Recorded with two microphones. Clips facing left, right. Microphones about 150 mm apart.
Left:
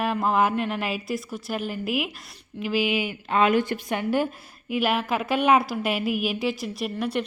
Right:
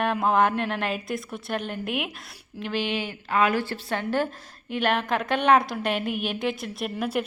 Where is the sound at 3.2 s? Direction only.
20° left (ahead or behind).